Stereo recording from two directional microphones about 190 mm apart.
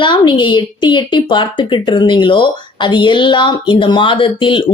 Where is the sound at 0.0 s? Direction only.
25° left (ahead or behind).